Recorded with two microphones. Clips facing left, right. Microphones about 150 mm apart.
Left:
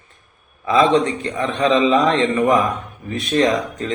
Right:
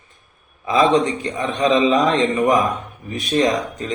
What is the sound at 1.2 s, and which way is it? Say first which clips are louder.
A man's voice: left 1 dB; 15° right (ahead or behind).